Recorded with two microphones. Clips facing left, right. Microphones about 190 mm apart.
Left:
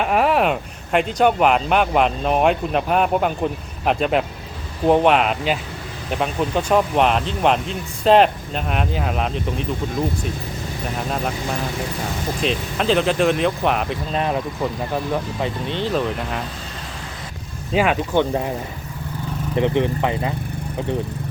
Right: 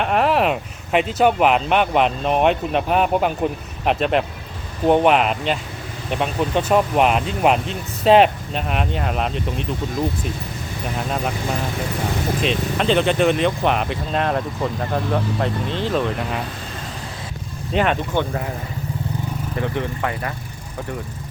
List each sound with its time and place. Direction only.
0.0 s speech: centre (ahead or behind)
12.4 s speech: centre (ahead or behind)
17.7 s speech: 5° left (ahead or behind)
18.2 s speech: 20° left (ahead or behind)
19.5 s speech: 20° left (ahead or behind)